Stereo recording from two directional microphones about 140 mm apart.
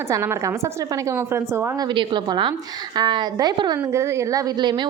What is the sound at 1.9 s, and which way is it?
A woman's voice, 35° right (ahead or behind).